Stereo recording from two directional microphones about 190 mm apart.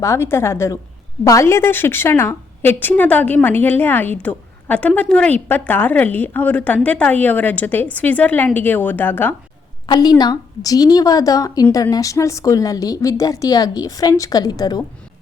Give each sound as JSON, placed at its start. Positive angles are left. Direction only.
{"t": 0.0, "sound": "speech", "side_deg": 15}
{"t": 9.8, "sound": "a woman's voice", "side_deg": 20}